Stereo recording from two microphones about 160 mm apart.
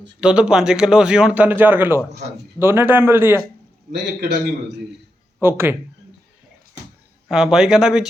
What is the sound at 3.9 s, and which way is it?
Music, 90° right.